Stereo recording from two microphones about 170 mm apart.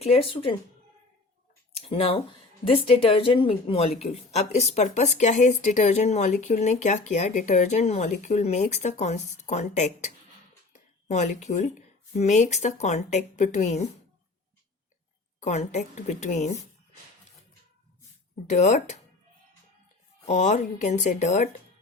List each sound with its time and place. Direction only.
0.0 s speech: 35° left (ahead or behind)
1.7 s speech: 35° left (ahead or behind)
10.7 s a sound: 45° left (ahead or behind)
12.1 s speech: 40° left (ahead or behind)
15.4 s speech: 45° left (ahead or behind)
18.4 s speech: 45° left (ahead or behind)
20.2 s speech: 45° left (ahead or behind)